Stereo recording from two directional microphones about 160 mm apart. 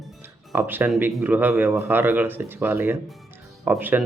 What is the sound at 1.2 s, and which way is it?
Speech, 10° right (ahead or behind).